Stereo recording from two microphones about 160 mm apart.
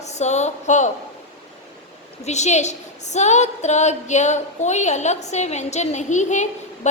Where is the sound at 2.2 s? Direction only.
45° left (ahead or behind).